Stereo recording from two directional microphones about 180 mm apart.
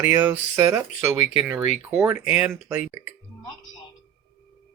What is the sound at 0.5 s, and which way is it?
Speech, 15° right (ahead or behind).